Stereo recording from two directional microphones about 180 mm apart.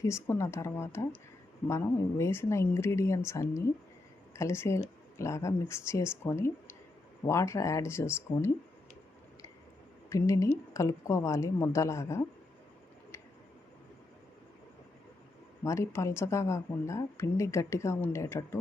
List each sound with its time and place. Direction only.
0.0 s a woman's voice: 15° left (ahead or behind)
10.1 s a woman's voice: 15° left (ahead or behind)
15.6 s a woman's voice: 15° left (ahead or behind)